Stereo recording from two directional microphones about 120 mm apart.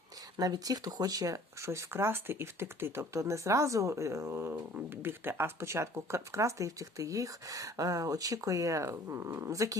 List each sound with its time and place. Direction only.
0.3 s speech: 30° right (ahead or behind)